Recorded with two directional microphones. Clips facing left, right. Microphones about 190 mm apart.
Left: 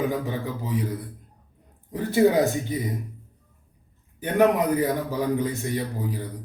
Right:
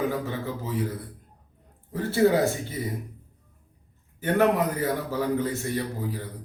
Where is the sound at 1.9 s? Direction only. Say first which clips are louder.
Left 2 dB; 15° left (ahead or behind).